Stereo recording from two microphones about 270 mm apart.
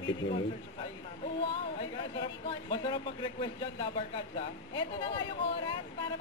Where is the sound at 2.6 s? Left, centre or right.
Centre.